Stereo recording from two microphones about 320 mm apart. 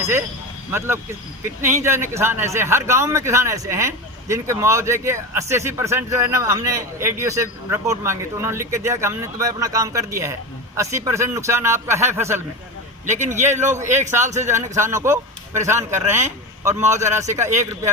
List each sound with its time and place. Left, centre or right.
0.0 s a man's voice: centre
13.1 s a man's voice: right
13.6 s a man's voice: centre